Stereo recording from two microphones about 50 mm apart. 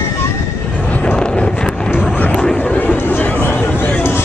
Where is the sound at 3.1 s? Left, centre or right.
Left.